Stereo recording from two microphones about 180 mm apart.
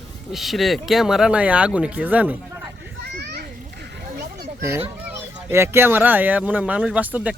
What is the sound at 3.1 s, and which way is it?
Children playing, 60° right (ahead or behind).